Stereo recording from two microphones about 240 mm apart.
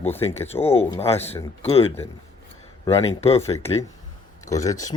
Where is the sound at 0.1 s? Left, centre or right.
Centre.